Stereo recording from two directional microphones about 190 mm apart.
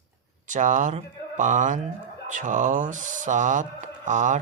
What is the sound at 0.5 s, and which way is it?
Speech, 40° right (ahead or behind).